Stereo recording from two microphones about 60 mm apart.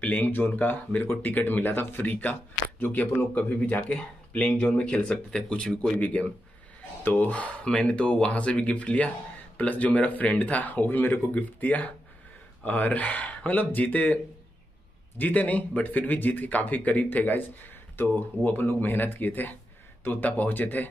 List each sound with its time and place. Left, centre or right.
0.0 s speech: left
3.3 s speech: left